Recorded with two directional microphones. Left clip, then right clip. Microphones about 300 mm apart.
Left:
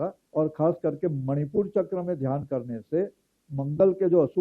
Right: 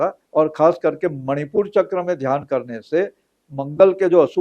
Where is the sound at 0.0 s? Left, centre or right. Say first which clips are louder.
Right 9 dB; centre.